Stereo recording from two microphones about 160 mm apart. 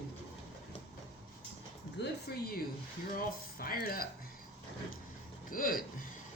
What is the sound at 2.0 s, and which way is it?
Speech, 90° left.